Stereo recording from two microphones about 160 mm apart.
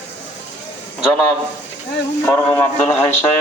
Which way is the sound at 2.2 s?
10° left (ahead or behind).